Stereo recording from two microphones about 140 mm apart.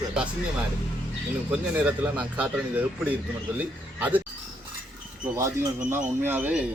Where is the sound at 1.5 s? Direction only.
10° right (ahead or behind).